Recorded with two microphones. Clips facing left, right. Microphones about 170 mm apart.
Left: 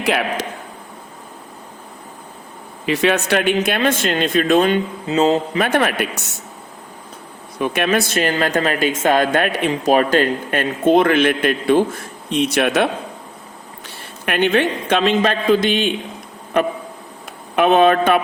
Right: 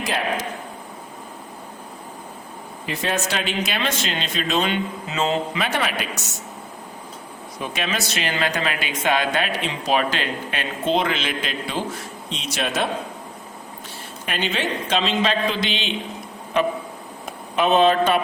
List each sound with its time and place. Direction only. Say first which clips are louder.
0.0 s a man's voice: left 5 dB; 70° left (ahead or behind)
2.8 s speech: left 8 dB; 85° left; by 4.8 s 50° left (ahead or behind)
5.0 s speech: left 8 dB; 35° left (ahead or behind)
5.6 s a man's voice: left 7 dB; 55° left (ahead or behind)
7.6 s speech: left 9 dB; 60° left (ahead or behind)
14.3 s a man's voice: left 8 dB; 55° left (ahead or behind)
17.5 s a man's voice: left 4 dB; 60° left (ahead or behind)